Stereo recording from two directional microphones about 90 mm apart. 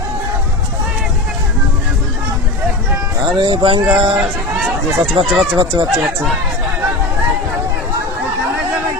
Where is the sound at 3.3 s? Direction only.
75° right (ahead or behind).